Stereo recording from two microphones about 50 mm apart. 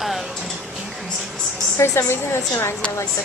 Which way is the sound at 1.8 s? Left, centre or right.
Left.